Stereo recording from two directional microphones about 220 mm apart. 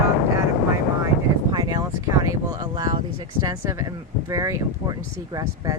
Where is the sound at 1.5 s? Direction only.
15° right (ahead or behind).